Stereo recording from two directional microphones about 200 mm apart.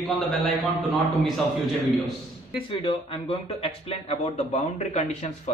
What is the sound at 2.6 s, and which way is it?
Speech, 25° left (ahead or behind).